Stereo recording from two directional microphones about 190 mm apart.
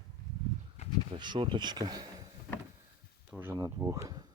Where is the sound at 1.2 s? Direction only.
25° right (ahead or behind).